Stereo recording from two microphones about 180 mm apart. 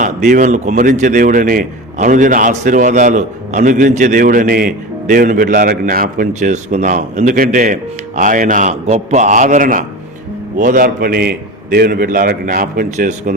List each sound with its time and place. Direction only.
0.0 s speech: 45° right (ahead or behind)